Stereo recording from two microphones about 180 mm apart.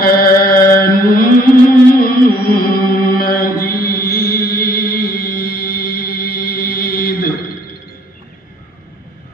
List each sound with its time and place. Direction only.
0.0 s mantra: 55° left (ahead or behind)
2.0 s chant: 55° left (ahead or behind)